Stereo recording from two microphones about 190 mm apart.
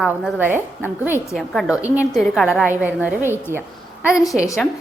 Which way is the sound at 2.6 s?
10° right (ahead or behind).